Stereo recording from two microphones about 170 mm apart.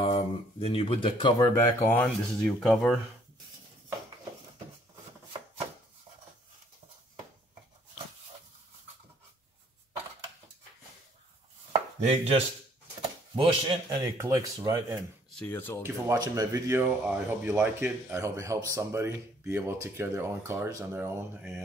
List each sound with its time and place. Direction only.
0.0 s speech: 35° left (ahead or behind)
1.9 s speech: 10° left (ahead or behind)
12.0 s chopping: 35° right (ahead or behind)
13.8 s speech: 20° right (ahead or behind)
15.3 s speech: 10° left (ahead or behind)
15.8 s speech: 20° right (ahead or behind)